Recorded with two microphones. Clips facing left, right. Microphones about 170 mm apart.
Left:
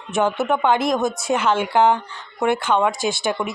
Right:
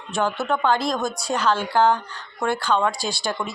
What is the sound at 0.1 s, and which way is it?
A woman's voice, 20° left (ahead or behind).